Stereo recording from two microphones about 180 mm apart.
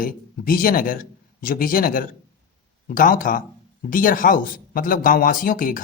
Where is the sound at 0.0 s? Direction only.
50° left (ahead or behind).